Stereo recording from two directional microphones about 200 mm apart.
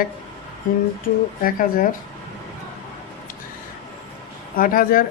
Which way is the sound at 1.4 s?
45° left (ahead or behind).